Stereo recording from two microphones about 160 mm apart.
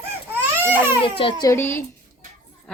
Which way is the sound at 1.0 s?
35° left (ahead or behind).